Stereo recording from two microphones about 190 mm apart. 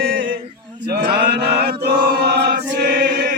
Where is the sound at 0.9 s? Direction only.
55° right (ahead or behind).